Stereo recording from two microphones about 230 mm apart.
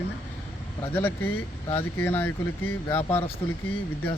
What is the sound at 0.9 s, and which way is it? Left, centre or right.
Speech, centre.